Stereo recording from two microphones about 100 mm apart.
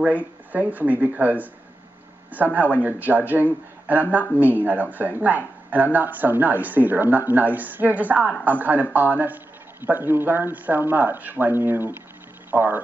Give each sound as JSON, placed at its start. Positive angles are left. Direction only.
{"t": 0.0, "sound": "speech", "side_deg": -15}